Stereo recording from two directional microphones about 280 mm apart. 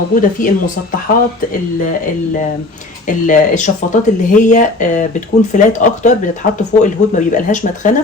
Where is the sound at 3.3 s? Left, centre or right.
Left.